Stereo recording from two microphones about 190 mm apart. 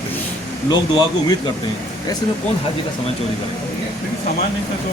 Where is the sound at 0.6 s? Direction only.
20° left (ahead or behind).